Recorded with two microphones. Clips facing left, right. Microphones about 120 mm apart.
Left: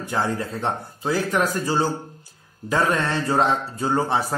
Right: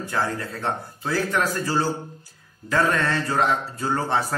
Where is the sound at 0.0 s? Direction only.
20° left (ahead or behind).